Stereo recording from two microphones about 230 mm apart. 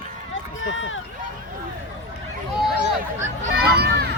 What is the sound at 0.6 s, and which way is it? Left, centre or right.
Run, left.